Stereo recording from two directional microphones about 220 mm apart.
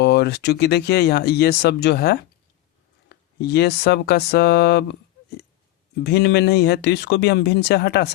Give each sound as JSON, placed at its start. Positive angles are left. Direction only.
{"t": 0.0, "sound": "speech", "side_deg": 50}
{"t": 6.0, "sound": "speech", "side_deg": 50}